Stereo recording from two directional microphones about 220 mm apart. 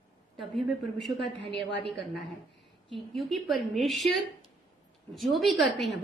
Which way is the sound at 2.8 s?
Centre (ahead or behind).